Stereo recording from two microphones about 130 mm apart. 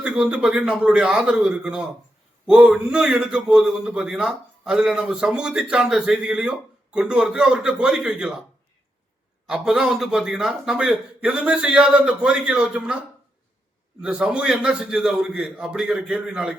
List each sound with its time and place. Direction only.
0.0 s a man's voice: 10° right (ahead or behind)
9.5 s a man's voice: 5° right (ahead or behind)
14.0 s a man's voice: 5° right (ahead or behind)